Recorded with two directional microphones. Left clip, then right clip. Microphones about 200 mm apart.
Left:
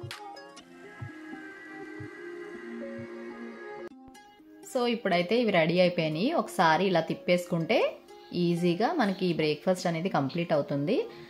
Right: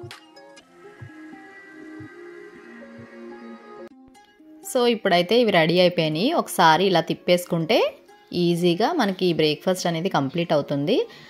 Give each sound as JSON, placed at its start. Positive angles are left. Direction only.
{"t": 4.7, "sound": "a woman's voice", "side_deg": -35}